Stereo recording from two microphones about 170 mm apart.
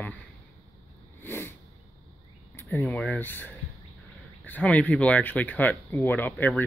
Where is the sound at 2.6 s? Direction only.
10° left (ahead or behind).